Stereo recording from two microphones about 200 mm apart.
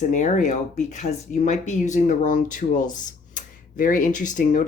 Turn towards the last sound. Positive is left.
turn(degrees=40)  # may be behind; listen again after turning